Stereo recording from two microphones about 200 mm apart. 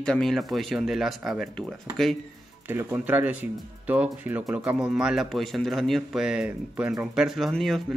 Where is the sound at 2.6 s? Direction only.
10° right (ahead or behind).